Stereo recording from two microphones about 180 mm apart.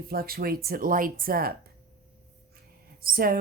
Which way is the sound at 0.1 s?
55° right (ahead or behind).